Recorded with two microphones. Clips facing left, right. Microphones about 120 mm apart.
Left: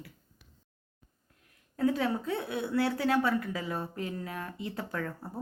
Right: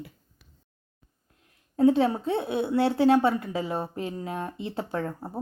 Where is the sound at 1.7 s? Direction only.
25° right (ahead or behind).